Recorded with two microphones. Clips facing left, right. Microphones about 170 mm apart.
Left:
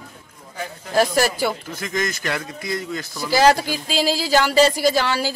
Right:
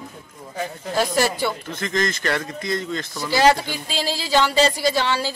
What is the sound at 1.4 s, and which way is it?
Speech, 5° left (ahead or behind).